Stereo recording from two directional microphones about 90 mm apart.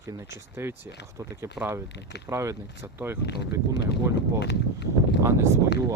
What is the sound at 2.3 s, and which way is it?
Speech, 35° right (ahead or behind).